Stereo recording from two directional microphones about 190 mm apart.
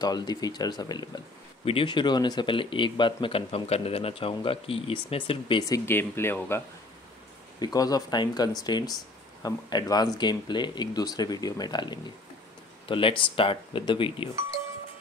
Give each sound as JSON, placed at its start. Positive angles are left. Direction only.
{"t": 0.0, "sound": "speech", "side_deg": 20}
{"t": 7.6, "sound": "speech", "side_deg": 20}